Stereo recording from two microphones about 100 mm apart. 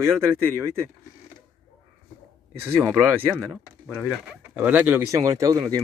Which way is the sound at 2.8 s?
20° right (ahead or behind).